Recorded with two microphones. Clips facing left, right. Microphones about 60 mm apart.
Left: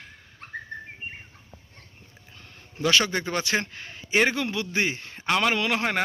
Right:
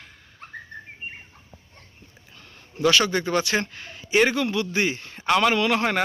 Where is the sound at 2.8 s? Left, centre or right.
Left.